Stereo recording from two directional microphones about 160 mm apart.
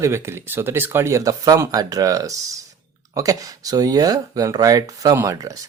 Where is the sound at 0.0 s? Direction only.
15° right (ahead or behind).